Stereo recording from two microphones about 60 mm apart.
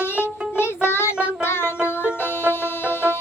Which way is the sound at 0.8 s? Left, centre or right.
Left.